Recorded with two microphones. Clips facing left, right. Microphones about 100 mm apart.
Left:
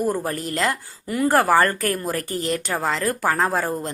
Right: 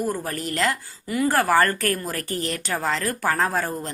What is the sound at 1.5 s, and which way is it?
Speech, 20° left (ahead or behind).